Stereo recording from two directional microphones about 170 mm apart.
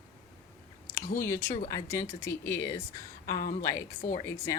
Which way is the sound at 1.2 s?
15° left (ahead or behind).